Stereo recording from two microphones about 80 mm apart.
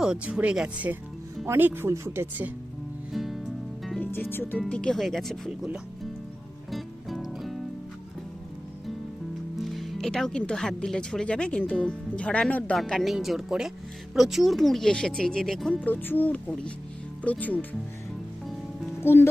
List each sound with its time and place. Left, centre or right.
0.0 s speech: centre
1.5 s speech: right
3.1 s music: centre
4.0 s speech: left
4.7 s speech: centre
6.7 s music: centre
9.6 s speech: centre
12.7 s speech: centre
15.7 s speech: left
18.9 s speech: left